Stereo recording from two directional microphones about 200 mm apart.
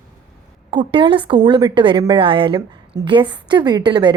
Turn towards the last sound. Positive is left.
turn(degrees=-20)  # may be behind; listen again after turning